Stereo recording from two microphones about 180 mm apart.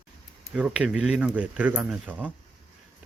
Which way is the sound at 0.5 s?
5° right (ahead or behind).